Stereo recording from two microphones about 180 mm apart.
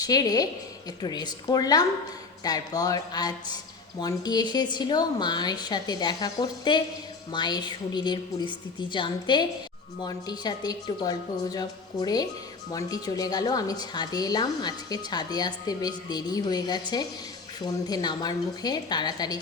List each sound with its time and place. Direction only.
0.0 s a woman's voice: 20° left (ahead or behind)